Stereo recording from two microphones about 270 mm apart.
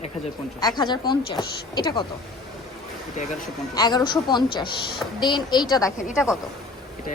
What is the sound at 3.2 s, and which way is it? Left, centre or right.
Speech, left.